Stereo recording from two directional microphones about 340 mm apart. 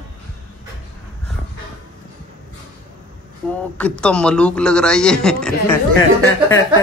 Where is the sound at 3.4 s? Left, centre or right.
Centre.